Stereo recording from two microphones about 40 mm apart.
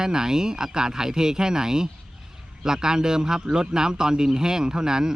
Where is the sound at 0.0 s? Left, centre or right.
Centre.